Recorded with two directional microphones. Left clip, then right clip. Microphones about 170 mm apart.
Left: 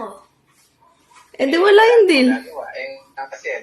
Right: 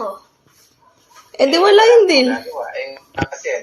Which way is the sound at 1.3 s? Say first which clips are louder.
Right 2 dB; 15° left (ahead or behind).